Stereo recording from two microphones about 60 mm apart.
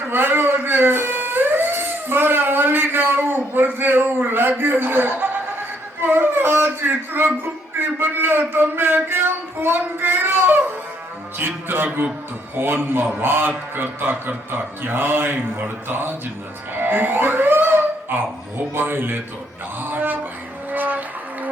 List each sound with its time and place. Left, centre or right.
0.1 s music: right
12.5 s speech: right
16.7 s a sound: right
20.7 s music: right